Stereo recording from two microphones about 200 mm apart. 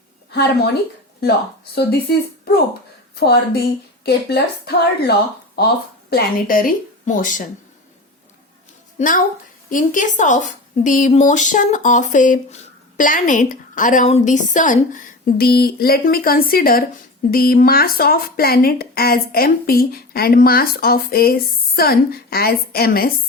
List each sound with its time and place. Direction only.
0.3 s a woman's voice: 55° left (ahead or behind)
1.7 s a woman's voice: 50° left (ahead or behind)
9.0 s a woman's voice: 40° left (ahead or behind)